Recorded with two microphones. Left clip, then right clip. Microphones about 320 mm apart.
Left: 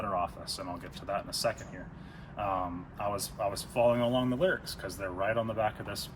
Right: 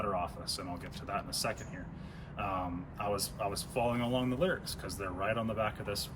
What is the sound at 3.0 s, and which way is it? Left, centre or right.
Speech, centre.